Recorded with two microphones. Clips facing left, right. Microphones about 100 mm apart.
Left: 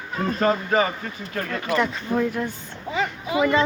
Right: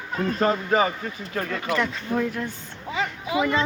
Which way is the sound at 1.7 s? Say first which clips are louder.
Left 3 dB; 15° left (ahead or behind).